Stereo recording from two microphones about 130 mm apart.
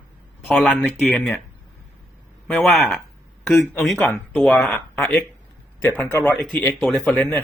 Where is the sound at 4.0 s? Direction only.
5° left (ahead or behind).